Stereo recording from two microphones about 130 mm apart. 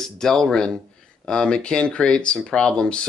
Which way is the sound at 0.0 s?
5° left (ahead or behind).